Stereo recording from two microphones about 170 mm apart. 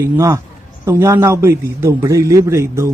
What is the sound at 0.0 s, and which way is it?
A man's voice, 20° right (ahead or behind).